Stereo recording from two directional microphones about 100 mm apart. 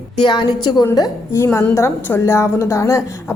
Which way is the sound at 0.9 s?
35° left (ahead or behind).